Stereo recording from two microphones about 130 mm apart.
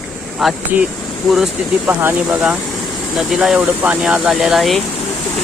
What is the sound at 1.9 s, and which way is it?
Speech, 15° right (ahead or behind).